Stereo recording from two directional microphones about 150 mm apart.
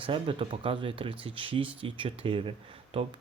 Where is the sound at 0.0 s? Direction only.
35° right (ahead or behind).